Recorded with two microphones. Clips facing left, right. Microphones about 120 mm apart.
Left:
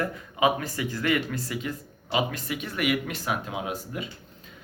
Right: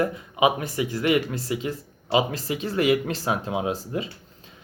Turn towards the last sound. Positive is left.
turn(degrees=-30)  # may be behind; listen again after turning